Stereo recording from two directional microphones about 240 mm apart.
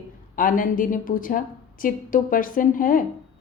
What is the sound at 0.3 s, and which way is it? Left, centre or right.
A woman's voice, left.